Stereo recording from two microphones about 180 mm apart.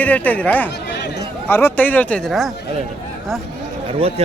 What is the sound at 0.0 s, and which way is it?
Speech, 10° left (ahead or behind).